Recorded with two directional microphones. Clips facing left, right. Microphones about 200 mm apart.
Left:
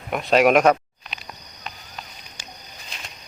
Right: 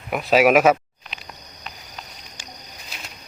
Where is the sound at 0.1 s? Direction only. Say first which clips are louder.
Right 1 dB; 5° right (ahead or behind).